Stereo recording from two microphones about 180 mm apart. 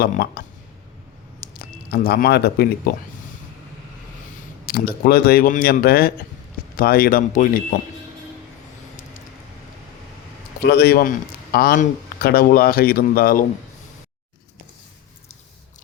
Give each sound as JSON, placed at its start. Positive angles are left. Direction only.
{"t": 0.0, "sound": "speech", "side_deg": 55}
{"t": 4.6, "sound": "speech", "side_deg": 55}
{"t": 10.6, "sound": "speech", "side_deg": 65}